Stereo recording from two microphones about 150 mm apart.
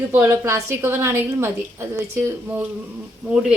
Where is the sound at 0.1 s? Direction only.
15° right (ahead or behind).